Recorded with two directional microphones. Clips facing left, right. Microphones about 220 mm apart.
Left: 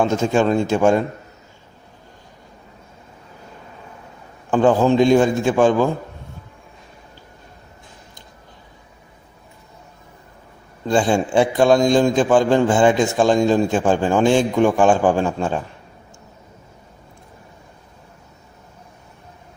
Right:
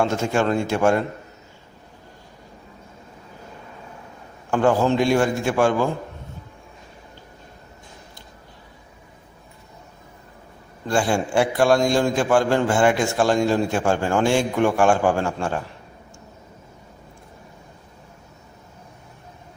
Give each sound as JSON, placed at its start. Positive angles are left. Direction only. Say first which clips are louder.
{"t": 0.0, "sound": "a man's voice", "louder": "left 4 dB", "side_deg": 15}
{"t": 4.5, "sound": "a man's voice", "louder": "left 4 dB", "side_deg": 20}
{"t": 10.8, "sound": "a man's voice", "louder": "left 4 dB", "side_deg": 20}